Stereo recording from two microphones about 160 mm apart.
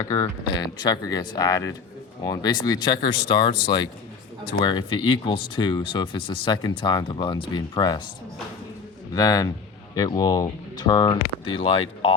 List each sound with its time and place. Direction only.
0.0 s speech: 20° left (ahead or behind)
9.1 s speech: 25° left (ahead or behind)